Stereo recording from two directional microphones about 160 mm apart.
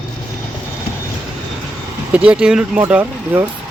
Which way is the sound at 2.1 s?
10° right (ahead or behind).